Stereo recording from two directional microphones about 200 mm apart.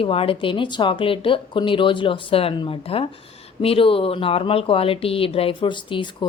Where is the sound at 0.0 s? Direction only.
25° left (ahead or behind).